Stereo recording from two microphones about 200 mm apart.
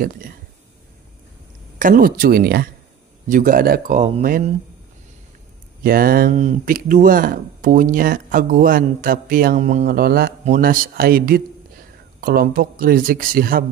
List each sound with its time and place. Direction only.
1.8 s speech: 45° right (ahead or behind)
5.9 s speech: 45° right (ahead or behind)